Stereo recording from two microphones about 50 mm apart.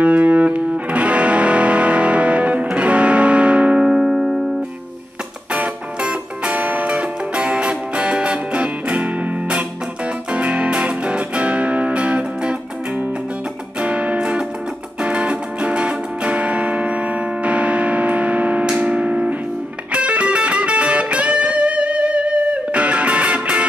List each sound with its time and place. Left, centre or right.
0.0 s music: right
3.8 s music: centre
5.5 s music: right
13.7 s music: right